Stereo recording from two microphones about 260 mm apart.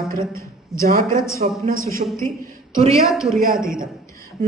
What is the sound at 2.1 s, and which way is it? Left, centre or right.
Speech, centre.